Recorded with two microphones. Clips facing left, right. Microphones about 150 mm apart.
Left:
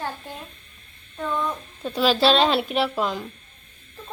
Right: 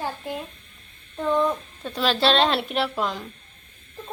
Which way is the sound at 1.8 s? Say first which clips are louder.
Left 3 dB; 5° left (ahead or behind).